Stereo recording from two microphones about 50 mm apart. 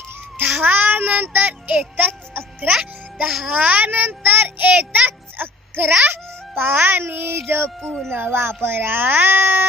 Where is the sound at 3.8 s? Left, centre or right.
Right.